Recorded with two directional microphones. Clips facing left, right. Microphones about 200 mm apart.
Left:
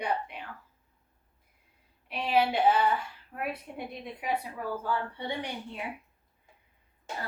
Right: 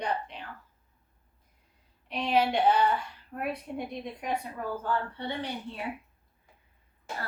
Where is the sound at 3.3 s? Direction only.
5° left (ahead or behind).